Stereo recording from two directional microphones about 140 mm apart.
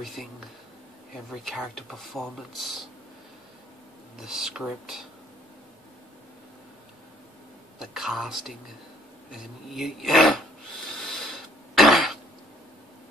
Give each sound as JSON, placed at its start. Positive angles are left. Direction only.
{"t": 0.0, "sound": "speech", "side_deg": 0}
{"t": 1.3, "sound": "speech", "side_deg": 0}
{"t": 4.2, "sound": "speech", "side_deg": -5}
{"t": 7.8, "sound": "speech", "side_deg": 0}
{"t": 11.0, "sound": "cough", "side_deg": 5}